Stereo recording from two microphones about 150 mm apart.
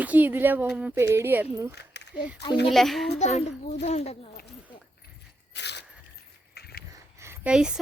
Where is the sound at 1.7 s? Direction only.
90° left.